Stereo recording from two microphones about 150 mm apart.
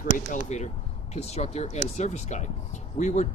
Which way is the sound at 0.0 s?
60° left (ahead or behind).